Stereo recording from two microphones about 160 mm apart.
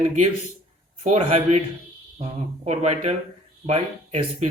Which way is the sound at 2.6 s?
45° right (ahead or behind).